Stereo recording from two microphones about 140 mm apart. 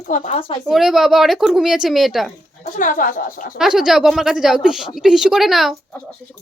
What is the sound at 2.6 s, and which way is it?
Speech, 70° left (ahead or behind).